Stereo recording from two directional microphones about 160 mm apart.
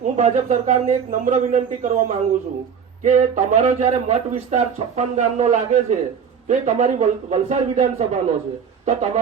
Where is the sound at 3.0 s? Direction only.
50° right (ahead or behind).